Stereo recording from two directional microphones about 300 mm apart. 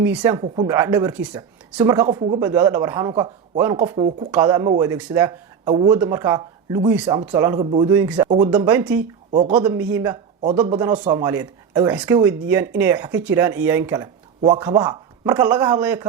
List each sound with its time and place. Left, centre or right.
0.0 s speech: centre
9.3 s speech: centre
9.6 s speech: centre